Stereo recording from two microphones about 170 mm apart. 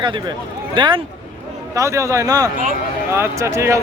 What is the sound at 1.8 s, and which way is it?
Speech, 20° right (ahead or behind).